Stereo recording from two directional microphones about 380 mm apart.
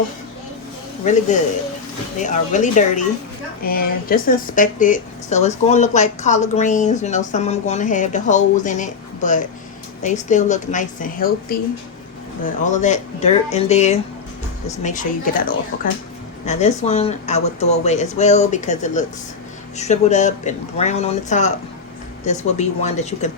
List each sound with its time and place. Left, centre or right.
1.0 s speech: centre
12.6 s speech: centre